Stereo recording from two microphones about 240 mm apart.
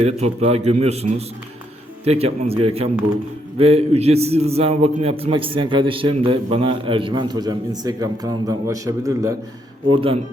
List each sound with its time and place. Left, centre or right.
0.0 s a man's voice: right
2.0 s a man's voice: right